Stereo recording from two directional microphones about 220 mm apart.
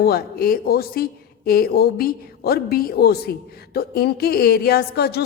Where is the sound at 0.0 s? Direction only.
45° left (ahead or behind).